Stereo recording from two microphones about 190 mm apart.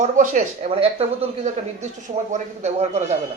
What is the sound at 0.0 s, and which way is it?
A man's voice, 40° right (ahead or behind).